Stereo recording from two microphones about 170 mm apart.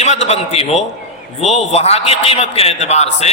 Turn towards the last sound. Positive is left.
turn(degrees=40)  # may be behind; listen again after turning